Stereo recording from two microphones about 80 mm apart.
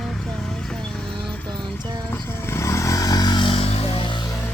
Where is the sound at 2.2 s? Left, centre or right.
Left.